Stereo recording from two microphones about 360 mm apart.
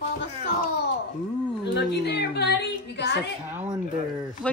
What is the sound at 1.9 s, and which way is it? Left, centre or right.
A woman's voice, left.